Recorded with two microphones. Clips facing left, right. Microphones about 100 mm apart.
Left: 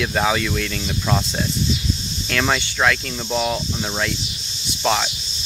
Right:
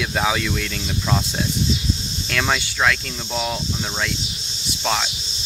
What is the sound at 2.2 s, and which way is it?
Cricket, centre (ahead or behind).